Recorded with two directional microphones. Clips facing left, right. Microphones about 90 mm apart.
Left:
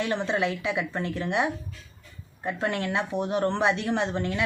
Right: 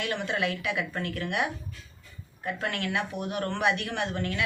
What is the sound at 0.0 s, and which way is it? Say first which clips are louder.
Speech: left 3 dB; 30° left (ahead or behind).